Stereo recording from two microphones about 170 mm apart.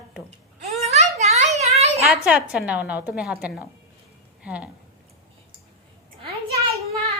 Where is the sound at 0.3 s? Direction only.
40° right (ahead or behind).